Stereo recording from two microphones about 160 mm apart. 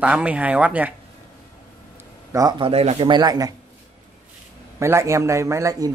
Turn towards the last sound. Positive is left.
turn(degrees=-20)  # may be behind; listen again after turning